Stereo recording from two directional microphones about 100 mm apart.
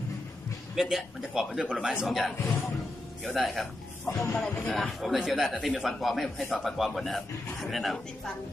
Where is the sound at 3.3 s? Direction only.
Centre (ahead or behind).